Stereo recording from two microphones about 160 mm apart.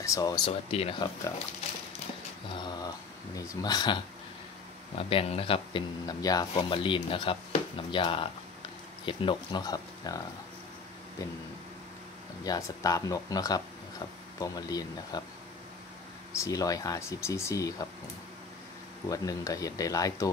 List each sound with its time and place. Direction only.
0.0 s speech: 20° left (ahead or behind)
0.5 s speech: 40° left (ahead or behind)
2.6 s mantra: 25° left (ahead or behind)
3.3 s speech: 25° left (ahead or behind)
12.4 s speech: 20° left (ahead or behind)
16.3 s speech: 20° left (ahead or behind)
19.0 s speech: 20° left (ahead or behind)